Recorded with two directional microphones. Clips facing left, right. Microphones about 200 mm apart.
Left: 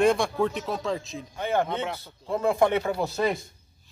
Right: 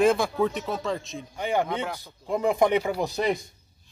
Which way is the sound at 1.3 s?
15° right (ahead or behind).